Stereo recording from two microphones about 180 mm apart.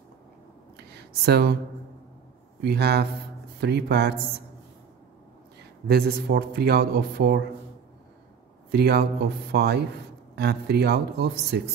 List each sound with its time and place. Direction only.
1.2 s speech: 60° right (ahead or behind)
2.6 s speech: 65° right (ahead or behind)
5.9 s speech: 60° right (ahead or behind)
8.7 s speech: 65° right (ahead or behind)